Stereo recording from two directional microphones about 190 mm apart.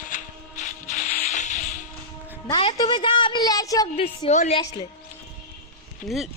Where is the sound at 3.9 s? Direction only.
30° left (ahead or behind).